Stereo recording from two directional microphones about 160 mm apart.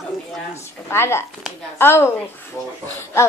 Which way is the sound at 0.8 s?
15° left (ahead or behind).